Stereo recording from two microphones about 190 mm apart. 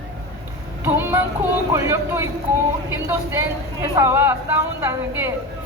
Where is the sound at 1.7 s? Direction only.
15° right (ahead or behind).